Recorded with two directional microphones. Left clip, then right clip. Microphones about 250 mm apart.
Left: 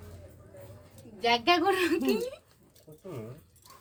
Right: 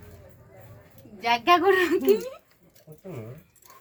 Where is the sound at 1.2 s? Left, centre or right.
Centre.